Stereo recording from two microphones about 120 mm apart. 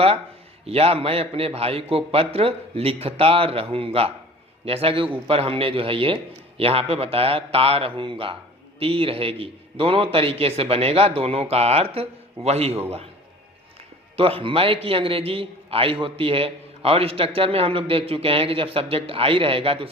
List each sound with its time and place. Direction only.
0.6 s a man's voice: 55° right (ahead or behind)
14.2 s a man's voice: 50° right (ahead or behind)